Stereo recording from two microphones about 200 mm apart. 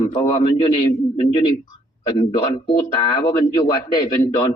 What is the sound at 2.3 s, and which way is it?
A man's voice, 20° left (ahead or behind).